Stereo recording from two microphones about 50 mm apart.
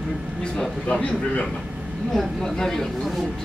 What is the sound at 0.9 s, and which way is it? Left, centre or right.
Speech, left.